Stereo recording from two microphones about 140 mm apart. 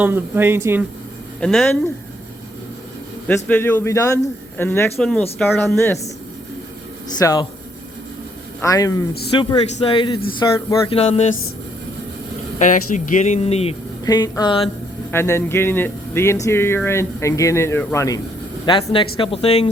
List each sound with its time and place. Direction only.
0.0 s speech: 15° right (ahead or behind)
1.4 s speech: 5° left (ahead or behind)
3.2 s speech: 10° left (ahead or behind)
4.9 s speech: 5° left (ahead or behind)
5.4 s speech: 15° left (ahead or behind)
7.2 s a man's voice: 25° left (ahead or behind)
8.6 s a man's voice: 25° left (ahead or behind)
9.4 s speech: 35° left (ahead or behind)
12.5 s speech: 65° left (ahead or behind); by 13.7 s 50° left (ahead or behind)
14.0 s speech: 25° left (ahead or behind)
15.1 s speech: 20° left (ahead or behind)
18.6 s speech: 35° left (ahead or behind)